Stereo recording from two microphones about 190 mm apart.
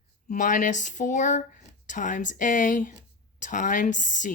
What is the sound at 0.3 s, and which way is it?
A woman's voice, 45° left (ahead or behind).